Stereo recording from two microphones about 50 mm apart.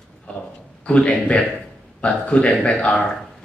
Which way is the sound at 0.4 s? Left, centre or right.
Left.